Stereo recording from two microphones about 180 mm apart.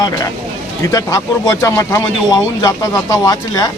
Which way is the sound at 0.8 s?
20° left (ahead or behind).